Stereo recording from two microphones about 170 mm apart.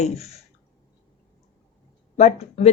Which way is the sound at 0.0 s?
40° left (ahead or behind).